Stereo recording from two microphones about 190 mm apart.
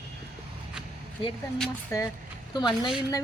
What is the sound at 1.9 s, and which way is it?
Speech, 15° left (ahead or behind).